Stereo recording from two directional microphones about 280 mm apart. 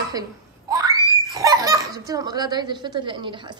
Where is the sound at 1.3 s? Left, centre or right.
Centre.